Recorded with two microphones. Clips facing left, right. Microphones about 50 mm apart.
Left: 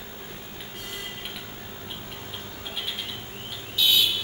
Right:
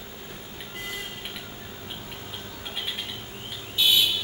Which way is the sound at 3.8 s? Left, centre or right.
Right.